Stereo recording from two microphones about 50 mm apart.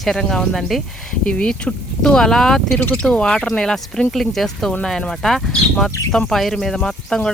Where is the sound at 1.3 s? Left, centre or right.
Left.